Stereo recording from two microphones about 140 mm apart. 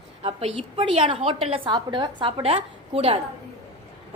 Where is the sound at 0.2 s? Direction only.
45° right (ahead or behind).